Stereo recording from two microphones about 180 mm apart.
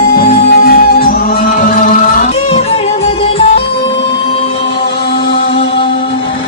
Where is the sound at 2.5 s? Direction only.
35° left (ahead or behind).